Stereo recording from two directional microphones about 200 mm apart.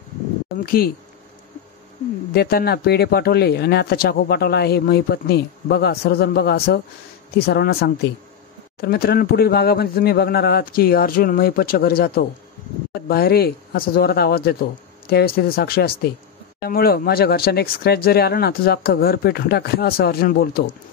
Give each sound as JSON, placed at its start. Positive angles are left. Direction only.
{"t": 0.7, "sound": "speech", "side_deg": 50}
{"t": 2.3, "sound": "speech", "side_deg": 50}